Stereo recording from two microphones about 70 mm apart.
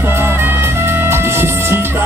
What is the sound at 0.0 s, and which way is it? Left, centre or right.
Music, right.